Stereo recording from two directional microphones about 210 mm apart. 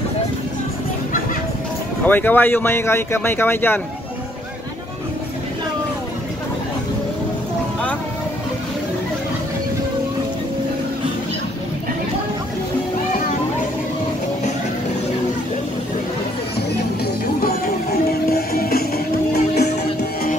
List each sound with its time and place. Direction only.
2.0 s speech: 10° left (ahead or behind)
18.3 s music: 45° left (ahead or behind)